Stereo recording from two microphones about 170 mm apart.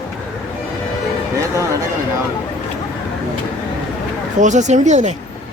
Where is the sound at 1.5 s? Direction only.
20° right (ahead or behind).